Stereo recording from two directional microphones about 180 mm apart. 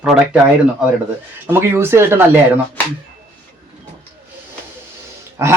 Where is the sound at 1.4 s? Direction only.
15° right (ahead or behind).